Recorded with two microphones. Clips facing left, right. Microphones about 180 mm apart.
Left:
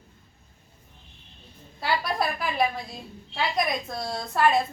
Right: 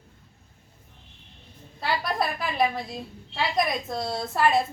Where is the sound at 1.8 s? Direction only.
Centre (ahead or behind).